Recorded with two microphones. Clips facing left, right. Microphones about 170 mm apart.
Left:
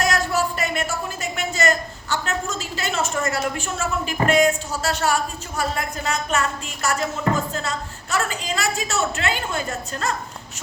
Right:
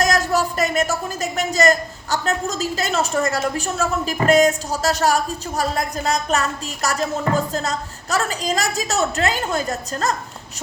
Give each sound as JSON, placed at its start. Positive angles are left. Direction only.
{"t": 0.0, "sound": "speech", "side_deg": -40}